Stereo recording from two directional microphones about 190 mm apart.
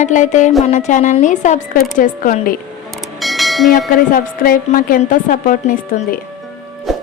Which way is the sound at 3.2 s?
Centre (ahead or behind).